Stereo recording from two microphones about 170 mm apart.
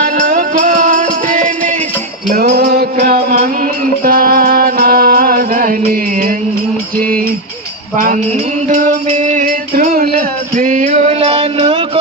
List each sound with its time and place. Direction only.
0.0 s music: 50° right (ahead or behind)
2.3 s music: 70° right (ahead or behind); by 6.3 s 55° right (ahead or behind)
7.9 s music: 50° right (ahead or behind)
10.5 s music: 50° right (ahead or behind)